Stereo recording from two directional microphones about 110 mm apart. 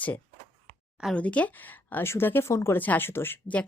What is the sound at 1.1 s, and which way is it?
A woman's voice, 10° left (ahead or behind).